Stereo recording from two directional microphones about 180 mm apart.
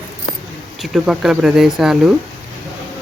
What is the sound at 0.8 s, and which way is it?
Speech, 5° right (ahead or behind).